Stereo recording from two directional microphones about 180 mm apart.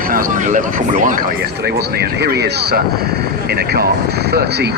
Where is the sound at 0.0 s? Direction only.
50° right (ahead or behind).